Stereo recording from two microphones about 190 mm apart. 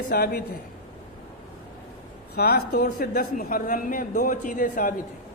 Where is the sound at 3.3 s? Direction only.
45° left (ahead or behind).